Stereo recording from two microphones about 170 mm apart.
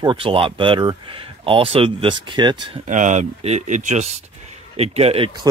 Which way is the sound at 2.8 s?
45° right (ahead or behind).